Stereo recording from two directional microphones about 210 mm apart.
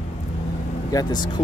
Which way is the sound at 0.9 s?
20° left (ahead or behind).